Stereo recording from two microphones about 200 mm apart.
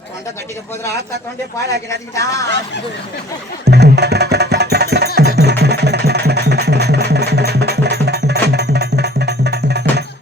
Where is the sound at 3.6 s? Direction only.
55° right (ahead or behind).